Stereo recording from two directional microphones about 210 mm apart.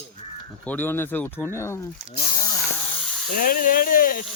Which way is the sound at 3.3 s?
40° left (ahead or behind).